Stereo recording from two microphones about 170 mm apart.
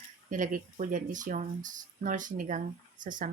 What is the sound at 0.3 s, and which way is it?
Speech, 50° right (ahead or behind).